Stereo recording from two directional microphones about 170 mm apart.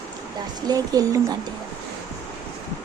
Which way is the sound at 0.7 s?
20° right (ahead or behind).